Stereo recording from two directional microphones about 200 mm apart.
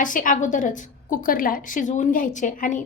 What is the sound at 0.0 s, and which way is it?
A woman's voice, 40° left (ahead or behind).